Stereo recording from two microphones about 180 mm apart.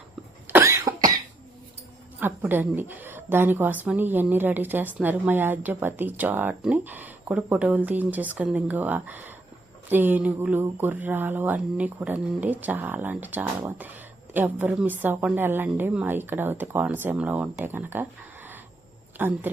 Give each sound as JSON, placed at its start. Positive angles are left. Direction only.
{"t": 0.4, "sound": "cough", "side_deg": -15}
{"t": 2.2, "sound": "a woman's voice", "side_deg": -10}